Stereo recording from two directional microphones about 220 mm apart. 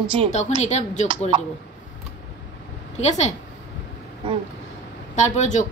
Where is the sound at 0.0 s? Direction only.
20° right (ahead or behind).